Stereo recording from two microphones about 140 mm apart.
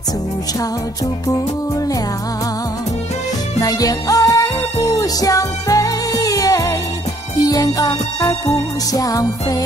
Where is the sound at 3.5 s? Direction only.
25° left (ahead or behind).